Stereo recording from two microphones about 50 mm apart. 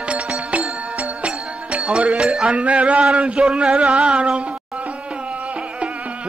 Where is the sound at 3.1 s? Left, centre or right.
Right.